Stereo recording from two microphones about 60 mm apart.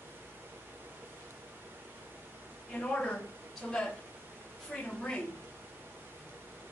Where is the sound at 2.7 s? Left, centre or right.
Centre.